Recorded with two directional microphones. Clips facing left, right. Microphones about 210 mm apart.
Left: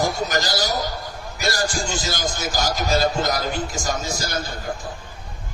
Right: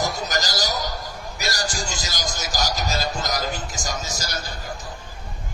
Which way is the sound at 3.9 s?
45° left (ahead or behind).